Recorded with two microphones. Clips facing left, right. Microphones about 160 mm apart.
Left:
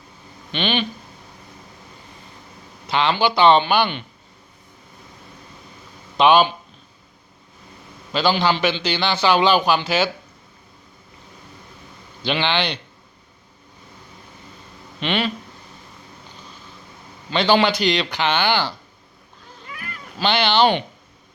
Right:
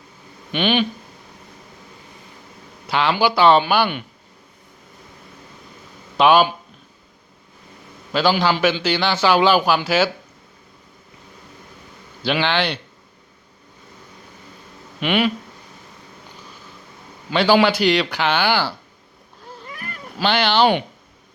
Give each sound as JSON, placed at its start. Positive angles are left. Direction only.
{"t": 0.5, "sound": "speech", "side_deg": -10}
{"t": 2.9, "sound": "speech", "side_deg": -10}
{"t": 6.1, "sound": "speech", "side_deg": -10}
{"t": 8.1, "sound": "speech", "side_deg": -10}
{"t": 12.2, "sound": "speech", "side_deg": -5}
{"t": 15.0, "sound": "speech", "side_deg": -10}
{"t": 17.2, "sound": "speech", "side_deg": -10}
{"t": 19.6, "sound": "a sound", "side_deg": -40}
{"t": 20.1, "sound": "speech", "side_deg": -10}